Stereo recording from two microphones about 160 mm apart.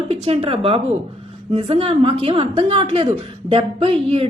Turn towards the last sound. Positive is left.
turn(degrees=-35)  # may be behind; listen again after turning